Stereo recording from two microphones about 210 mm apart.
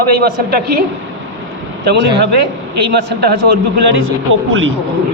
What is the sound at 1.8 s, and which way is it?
A man's voice, 55° right (ahead or behind).